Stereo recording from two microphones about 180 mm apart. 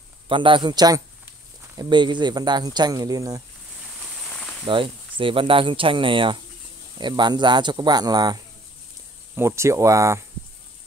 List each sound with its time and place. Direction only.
0.3 s speech: 25° right (ahead or behind)
4.3 s a sound: 5° left (ahead or behind)
4.6 s speech: 30° right (ahead or behind)